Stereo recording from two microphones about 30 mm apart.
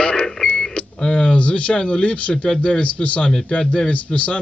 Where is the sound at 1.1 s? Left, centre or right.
Left.